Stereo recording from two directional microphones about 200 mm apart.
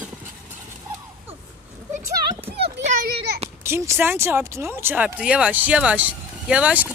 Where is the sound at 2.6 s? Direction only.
35° right (ahead or behind).